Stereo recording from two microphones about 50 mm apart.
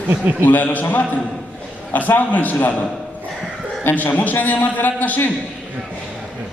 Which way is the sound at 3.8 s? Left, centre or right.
Left.